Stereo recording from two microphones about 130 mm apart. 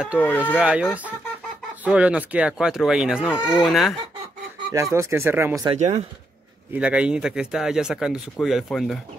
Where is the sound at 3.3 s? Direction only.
25° left (ahead or behind).